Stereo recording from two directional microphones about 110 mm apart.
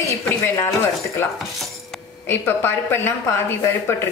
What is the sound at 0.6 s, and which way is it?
Speech, 25° left (ahead or behind).